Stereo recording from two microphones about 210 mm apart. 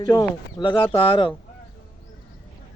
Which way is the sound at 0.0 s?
20° left (ahead or behind).